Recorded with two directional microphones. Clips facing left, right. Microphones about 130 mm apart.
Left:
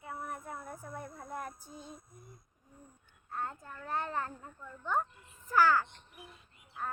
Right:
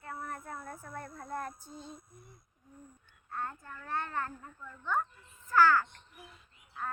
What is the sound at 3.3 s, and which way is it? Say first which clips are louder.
A child's voice: even; 15° left (ahead or behind).